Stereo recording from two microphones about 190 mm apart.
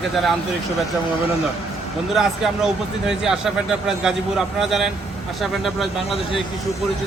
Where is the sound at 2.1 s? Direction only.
5° right (ahead or behind).